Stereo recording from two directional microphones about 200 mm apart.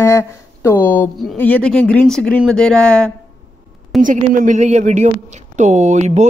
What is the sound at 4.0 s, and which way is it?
Speech, 40° right (ahead or behind).